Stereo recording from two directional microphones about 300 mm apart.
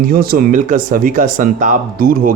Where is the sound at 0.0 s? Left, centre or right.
Right.